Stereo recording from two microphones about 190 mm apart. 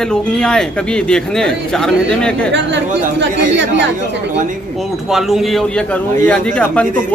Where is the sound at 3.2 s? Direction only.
70° right (ahead or behind).